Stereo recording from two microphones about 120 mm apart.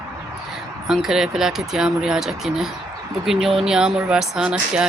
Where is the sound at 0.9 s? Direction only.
5° right (ahead or behind).